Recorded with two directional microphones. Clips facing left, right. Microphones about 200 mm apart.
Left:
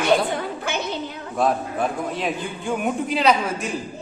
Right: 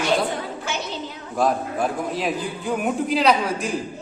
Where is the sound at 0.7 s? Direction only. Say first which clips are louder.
Left 2 dB; 55° left (ahead or behind).